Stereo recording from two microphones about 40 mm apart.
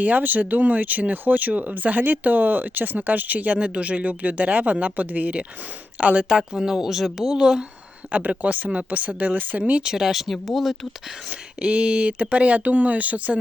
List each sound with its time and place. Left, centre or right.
0.0 s speech: right
6.6 s speech: centre
8.1 s speech: right
9.8 s speech: centre
11.3 s speech: right